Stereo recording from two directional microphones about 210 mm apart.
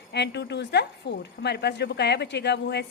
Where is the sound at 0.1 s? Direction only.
55° left (ahead or behind).